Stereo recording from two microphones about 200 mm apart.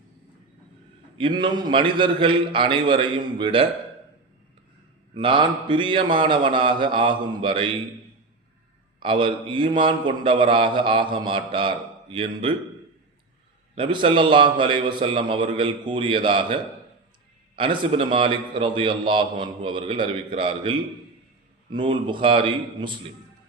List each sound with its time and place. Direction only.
1.2 s a man's voice: 20° right (ahead or behind)
5.1 s a man's voice: 25° right (ahead or behind)
9.0 s a man's voice: 25° right (ahead or behind)
13.7 s a man's voice: 25° right (ahead or behind)
17.6 s a man's voice: 25° right (ahead or behind)